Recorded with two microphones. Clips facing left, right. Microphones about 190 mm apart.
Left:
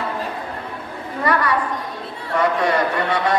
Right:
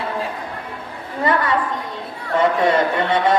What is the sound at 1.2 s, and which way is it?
A man's voice, 25° right (ahead or behind).